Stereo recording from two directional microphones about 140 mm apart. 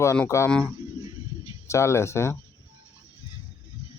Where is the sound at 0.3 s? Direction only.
20° left (ahead or behind).